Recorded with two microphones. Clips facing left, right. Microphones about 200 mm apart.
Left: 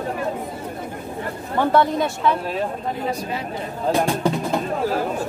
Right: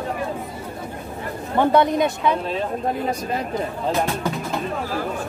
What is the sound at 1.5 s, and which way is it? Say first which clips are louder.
Speech: right 1 dB; 20° right (ahead or behind).